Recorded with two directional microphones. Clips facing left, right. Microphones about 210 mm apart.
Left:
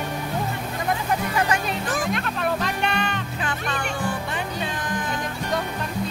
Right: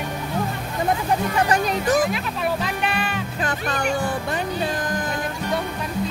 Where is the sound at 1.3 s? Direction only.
40° right (ahead or behind).